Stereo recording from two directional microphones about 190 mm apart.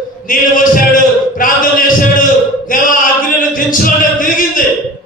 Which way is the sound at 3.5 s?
45° left (ahead or behind).